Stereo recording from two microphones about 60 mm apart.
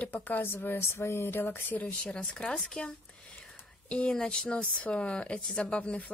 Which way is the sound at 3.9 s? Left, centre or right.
Centre.